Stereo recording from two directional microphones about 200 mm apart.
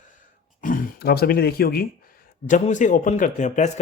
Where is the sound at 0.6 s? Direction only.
45° left (ahead or behind).